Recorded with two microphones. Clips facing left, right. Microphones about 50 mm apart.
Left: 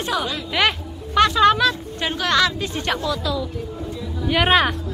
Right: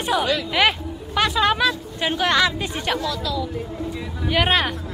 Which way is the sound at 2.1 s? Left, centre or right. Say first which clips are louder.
Even; centre.